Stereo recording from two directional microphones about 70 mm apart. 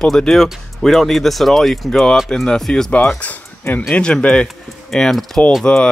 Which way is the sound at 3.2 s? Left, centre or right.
Left.